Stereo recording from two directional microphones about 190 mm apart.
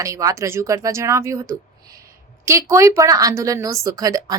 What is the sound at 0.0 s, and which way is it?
A woman's voice, 15° right (ahead or behind).